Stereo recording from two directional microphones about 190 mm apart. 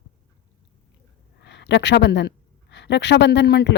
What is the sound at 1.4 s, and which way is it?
Speech, 65° left (ahead or behind).